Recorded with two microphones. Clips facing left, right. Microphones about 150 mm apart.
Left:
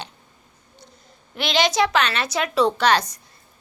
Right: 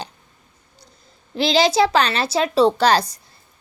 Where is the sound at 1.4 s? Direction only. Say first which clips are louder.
Right 4 dB; 30° right (ahead or behind).